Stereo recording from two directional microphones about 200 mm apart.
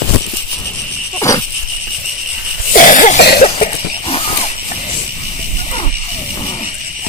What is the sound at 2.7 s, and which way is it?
Cough, 40° left (ahead or behind).